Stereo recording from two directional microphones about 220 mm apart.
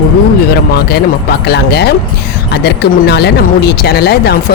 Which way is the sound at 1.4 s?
50° left (ahead or behind).